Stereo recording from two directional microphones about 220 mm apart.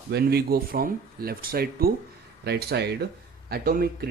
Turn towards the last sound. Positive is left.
turn(degrees=-40)  # may be behind; listen again after turning